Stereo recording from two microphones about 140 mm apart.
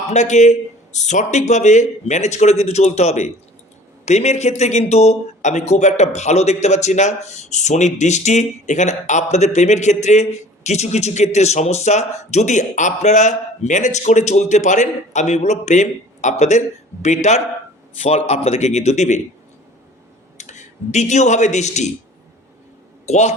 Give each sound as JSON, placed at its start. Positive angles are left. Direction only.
{"t": 0.1, "sound": "a man's voice", "side_deg": 55}
{"t": 20.4, "sound": "a man's voice", "side_deg": 55}
{"t": 23.0, "sound": "a man's voice", "side_deg": 55}